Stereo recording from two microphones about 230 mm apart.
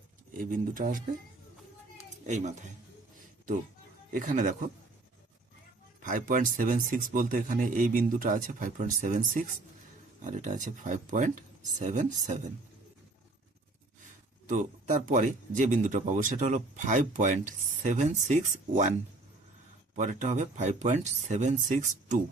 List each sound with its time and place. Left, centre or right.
0.3 s speech: right
2.2 s speech: right
4.1 s speech: right
6.0 s speech: right
14.4 s speech: right
20.0 s speech: right